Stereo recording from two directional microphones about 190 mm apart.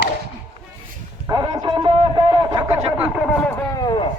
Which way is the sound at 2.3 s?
20° right (ahead or behind).